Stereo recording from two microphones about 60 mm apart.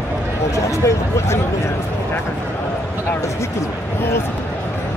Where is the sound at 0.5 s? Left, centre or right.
Left.